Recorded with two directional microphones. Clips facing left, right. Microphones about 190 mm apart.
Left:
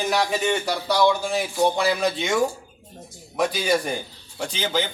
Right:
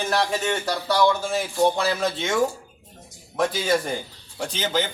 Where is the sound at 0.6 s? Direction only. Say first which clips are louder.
Right 2 dB; centre (ahead or behind).